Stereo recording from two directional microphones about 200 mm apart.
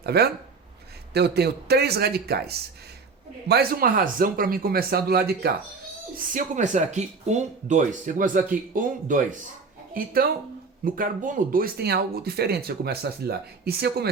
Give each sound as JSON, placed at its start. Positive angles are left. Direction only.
{"t": 0.0, "sound": "speech", "side_deg": -55}